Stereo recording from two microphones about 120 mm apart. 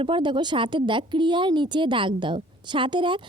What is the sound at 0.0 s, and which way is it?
Speech, 45° right (ahead or behind).